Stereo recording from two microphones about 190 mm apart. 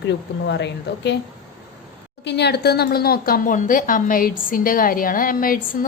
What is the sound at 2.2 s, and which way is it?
A woman's voice, 60° left (ahead or behind).